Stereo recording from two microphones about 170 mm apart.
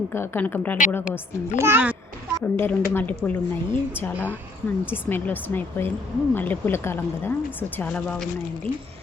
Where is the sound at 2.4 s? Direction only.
10° left (ahead or behind).